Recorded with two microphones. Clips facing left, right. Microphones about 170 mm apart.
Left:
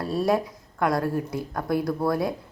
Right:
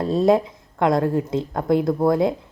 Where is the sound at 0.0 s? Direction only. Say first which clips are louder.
Right 6 dB; 20° right (ahead or behind).